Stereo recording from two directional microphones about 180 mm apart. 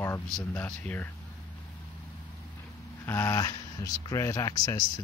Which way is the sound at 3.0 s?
15° left (ahead or behind).